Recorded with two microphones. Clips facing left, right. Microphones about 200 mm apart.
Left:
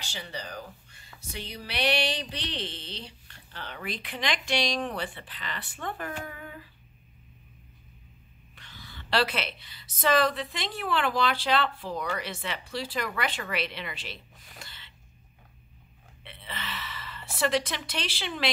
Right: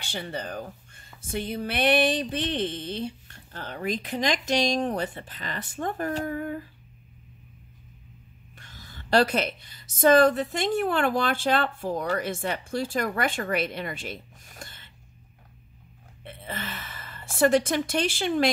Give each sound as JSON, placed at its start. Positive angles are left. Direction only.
{"t": 0.0, "sound": "speech", "side_deg": -50}
{"t": 8.5, "sound": "speech", "side_deg": -45}
{"t": 14.6, "sound": "gasp", "side_deg": -45}
{"t": 16.3, "sound": "a sound", "side_deg": -45}